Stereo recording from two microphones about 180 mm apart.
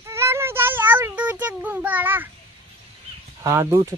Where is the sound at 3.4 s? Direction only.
15° right (ahead or behind).